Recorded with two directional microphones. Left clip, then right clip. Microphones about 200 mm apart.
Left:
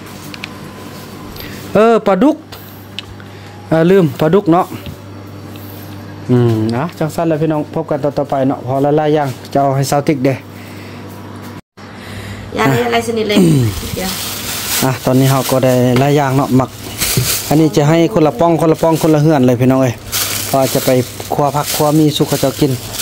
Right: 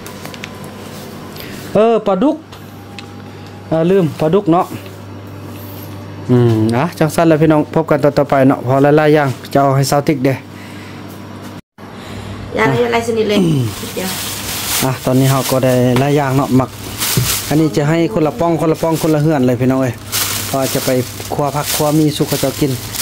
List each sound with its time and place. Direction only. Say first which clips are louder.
1.7 s speech: left 2 dB; 15° left (ahead or behind)
3.7 s speech: left 3 dB; 20° left (ahead or behind)
6.3 s speech: right 1 dB; centre (ahead or behind)
7.0 s speech: right 5 dB; 15° right (ahead or behind); by 10.4 s 5° left (ahead or behind)
12.5 s a woman's voice: even; 35° left (ahead or behind)
14.8 s speech: left 2 dB; 10° left (ahead or behind)
20.2 s a sound: left 3 dB; 5° left (ahead or behind)
20.9 s speech: left 3 dB; 5° left (ahead or behind)